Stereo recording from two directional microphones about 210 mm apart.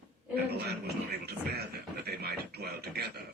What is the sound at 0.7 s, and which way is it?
Speech, 50° right (ahead or behind).